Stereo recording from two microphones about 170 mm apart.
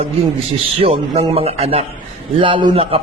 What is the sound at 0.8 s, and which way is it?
A man's voice, 35° right (ahead or behind).